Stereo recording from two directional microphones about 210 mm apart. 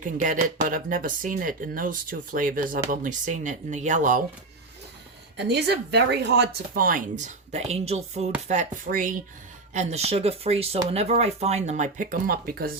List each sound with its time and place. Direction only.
0.0 s speech: 40° right (ahead or behind)
5.4 s speech: 50° right (ahead or behind)